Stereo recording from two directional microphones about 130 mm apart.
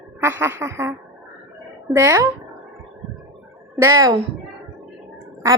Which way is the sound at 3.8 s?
25° right (ahead or behind).